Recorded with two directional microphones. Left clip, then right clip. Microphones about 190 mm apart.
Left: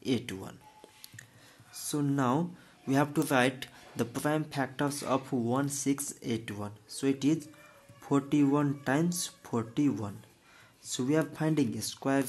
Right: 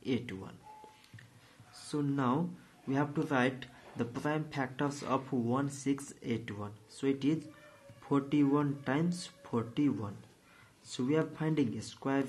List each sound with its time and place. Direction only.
0.0 s speech: 35° left (ahead or behind)
1.9 s speech: 35° left (ahead or behind)